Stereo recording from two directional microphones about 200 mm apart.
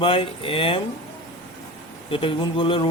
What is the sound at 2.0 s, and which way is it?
Speech, 25° left (ahead or behind).